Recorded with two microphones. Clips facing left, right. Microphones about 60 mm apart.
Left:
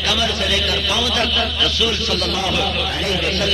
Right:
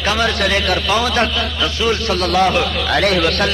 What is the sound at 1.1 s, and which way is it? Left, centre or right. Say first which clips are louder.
A man's voice: right 2 dB; right.